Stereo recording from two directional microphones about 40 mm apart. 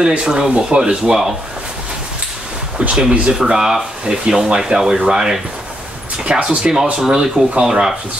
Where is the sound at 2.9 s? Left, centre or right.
Right.